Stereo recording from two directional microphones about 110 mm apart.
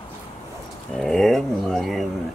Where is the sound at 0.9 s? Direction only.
5° left (ahead or behind).